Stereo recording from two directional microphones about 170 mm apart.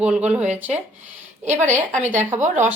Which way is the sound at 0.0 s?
5° right (ahead or behind).